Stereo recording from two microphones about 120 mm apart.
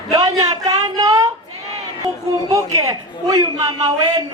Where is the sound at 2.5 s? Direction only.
30° right (ahead or behind).